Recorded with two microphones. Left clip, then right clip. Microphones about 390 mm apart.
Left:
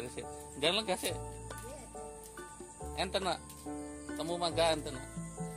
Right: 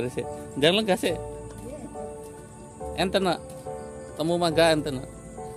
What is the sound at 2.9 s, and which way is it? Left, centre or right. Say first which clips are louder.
Speech: right 10 dB; left.